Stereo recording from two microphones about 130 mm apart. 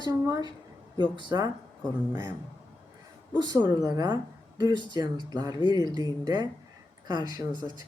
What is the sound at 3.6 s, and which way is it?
Speech, 30° right (ahead or behind).